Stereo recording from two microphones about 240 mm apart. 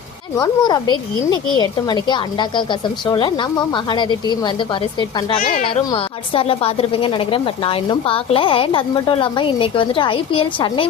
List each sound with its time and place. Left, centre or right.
0.3 s a woman's voice: centre